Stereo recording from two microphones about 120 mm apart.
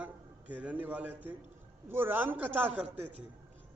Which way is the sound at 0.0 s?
10° right (ahead or behind).